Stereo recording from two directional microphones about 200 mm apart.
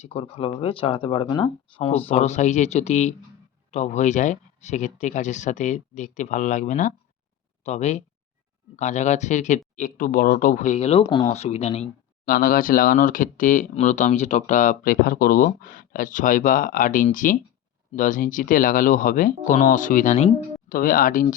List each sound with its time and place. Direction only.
0.0 s speech: 30° left (ahead or behind)